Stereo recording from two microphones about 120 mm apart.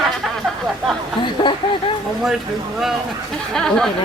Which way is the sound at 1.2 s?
40° left (ahead or behind).